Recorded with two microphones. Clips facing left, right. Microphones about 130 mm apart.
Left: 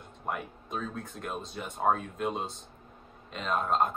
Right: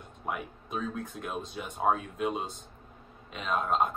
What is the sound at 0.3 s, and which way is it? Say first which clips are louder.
Speech: even; 5° right (ahead or behind).